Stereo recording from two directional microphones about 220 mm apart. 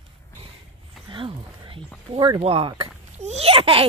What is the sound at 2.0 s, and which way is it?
Speech, 20° right (ahead or behind).